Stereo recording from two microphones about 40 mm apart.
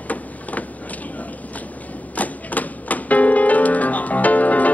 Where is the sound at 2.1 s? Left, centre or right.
Left.